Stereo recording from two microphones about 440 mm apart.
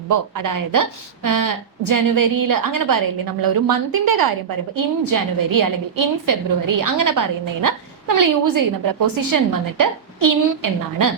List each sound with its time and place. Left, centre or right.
0.1 s a woman's voice: right